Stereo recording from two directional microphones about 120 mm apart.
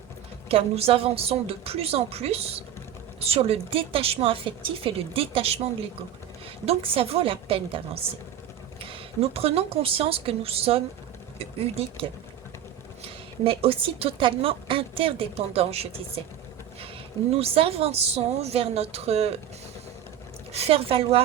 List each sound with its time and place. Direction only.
0.4 s a woman's voice: 55° right (ahead or behind)
6.7 s a woman's voice: 50° right (ahead or behind)
13.4 s a woman's voice: 50° right (ahead or behind)
17.3 s a woman's voice: 55° right (ahead or behind)
20.5 s a woman's voice: 55° right (ahead or behind)